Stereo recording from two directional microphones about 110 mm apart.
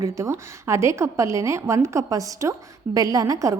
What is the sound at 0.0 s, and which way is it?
A woman's voice, 30° right (ahead or behind).